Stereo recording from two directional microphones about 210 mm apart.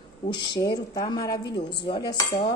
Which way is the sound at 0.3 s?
20° left (ahead or behind).